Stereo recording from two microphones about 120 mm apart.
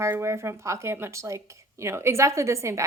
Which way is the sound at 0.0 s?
20° right (ahead or behind).